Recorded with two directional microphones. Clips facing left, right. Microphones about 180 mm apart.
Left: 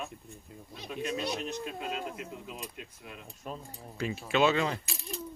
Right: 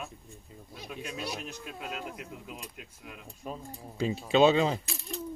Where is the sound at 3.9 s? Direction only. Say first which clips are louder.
Right 4 dB; 20° right (ahead or behind).